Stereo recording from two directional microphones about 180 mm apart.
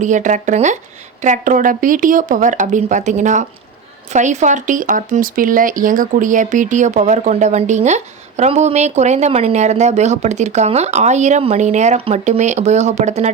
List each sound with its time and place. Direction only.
0.0 s speech: 45° right (ahead or behind)